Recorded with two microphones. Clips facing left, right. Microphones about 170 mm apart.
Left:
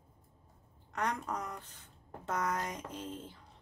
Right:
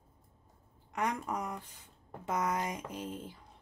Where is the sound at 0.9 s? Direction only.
10° right (ahead or behind).